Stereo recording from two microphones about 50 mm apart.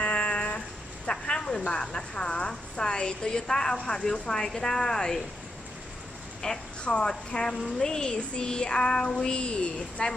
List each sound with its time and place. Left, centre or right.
0.0 s a sound: left
1.6 s a woman's voice: left
6.4 s a woman's voice: centre